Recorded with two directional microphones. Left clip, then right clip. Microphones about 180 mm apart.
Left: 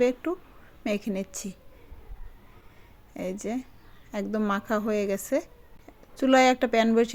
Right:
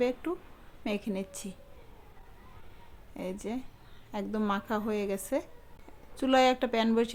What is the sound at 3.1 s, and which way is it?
Speech, 25° left (ahead or behind).